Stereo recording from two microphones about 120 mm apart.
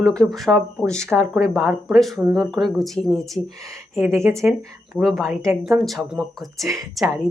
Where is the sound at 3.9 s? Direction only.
20° right (ahead or behind).